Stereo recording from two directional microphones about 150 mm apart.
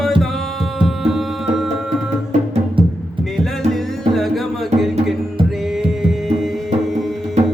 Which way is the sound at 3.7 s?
Centre (ahead or behind).